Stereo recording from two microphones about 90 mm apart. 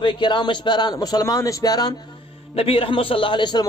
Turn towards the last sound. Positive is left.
turn(degrees=60)  # may be behind; listen again after turning